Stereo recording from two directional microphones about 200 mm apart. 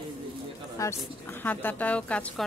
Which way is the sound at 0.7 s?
10° left (ahead or behind).